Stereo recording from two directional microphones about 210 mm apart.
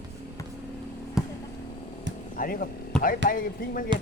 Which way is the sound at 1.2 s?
Centre (ahead or behind).